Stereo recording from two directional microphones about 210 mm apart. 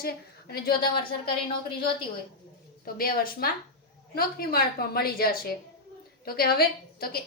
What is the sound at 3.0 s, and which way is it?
A woman's voice, 45° left (ahead or behind).